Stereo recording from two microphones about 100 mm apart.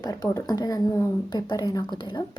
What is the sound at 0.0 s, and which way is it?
Speech, 35° left (ahead or behind).